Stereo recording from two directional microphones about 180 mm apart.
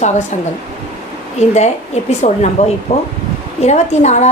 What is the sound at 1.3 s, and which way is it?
A woman's voice, 40° left (ahead or behind).